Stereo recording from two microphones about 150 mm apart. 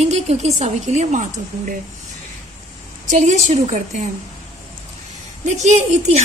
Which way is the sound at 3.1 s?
55° right (ahead or behind).